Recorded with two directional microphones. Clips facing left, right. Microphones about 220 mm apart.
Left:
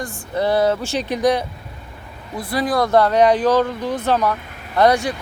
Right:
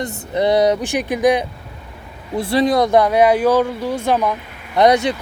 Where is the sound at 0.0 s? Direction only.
20° right (ahead or behind).